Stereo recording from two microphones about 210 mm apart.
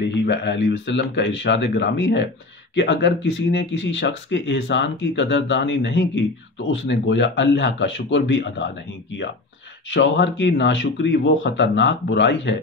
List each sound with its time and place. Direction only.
0.0 s speech: 55° left (ahead or behind)
9.8 s speech: 55° left (ahead or behind)